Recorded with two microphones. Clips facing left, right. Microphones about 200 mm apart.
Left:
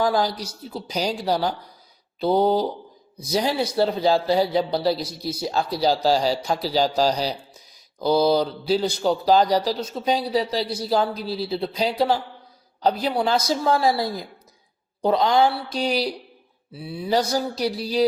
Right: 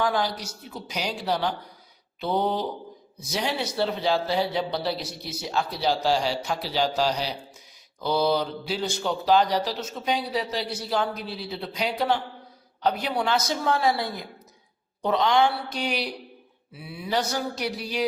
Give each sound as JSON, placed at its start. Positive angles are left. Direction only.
{"t": 0.0, "sound": "speech", "side_deg": 35}